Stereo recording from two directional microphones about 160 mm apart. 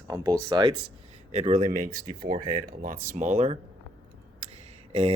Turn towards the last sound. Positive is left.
turn(degrees=-40)  # may be behind; listen again after turning